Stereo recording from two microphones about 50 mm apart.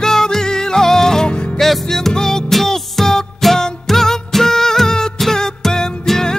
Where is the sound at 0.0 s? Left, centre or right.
Centre.